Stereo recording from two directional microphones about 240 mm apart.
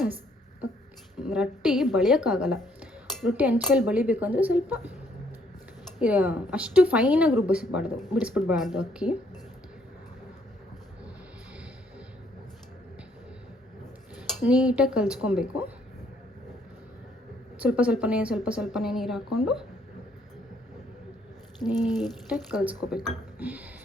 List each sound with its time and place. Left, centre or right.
1.2 s a woman's voice: centre
6.0 s a woman's voice: centre
14.4 s a woman's voice: centre
17.6 s a woman's voice: centre
21.6 s a woman's voice: centre
23.0 s a sound: centre